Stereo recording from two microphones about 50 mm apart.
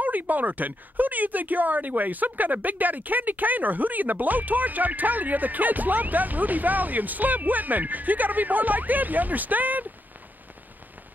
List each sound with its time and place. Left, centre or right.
0.0 s speech: right